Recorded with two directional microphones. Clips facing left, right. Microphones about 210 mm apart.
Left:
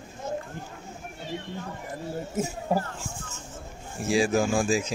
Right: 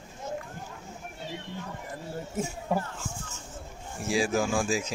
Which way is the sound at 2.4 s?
40° left (ahead or behind).